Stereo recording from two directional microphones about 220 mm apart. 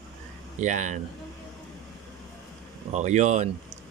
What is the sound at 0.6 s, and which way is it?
Speech, 35° right (ahead or behind).